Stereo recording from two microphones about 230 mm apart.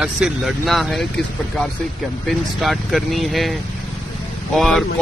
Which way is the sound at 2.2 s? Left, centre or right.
Centre.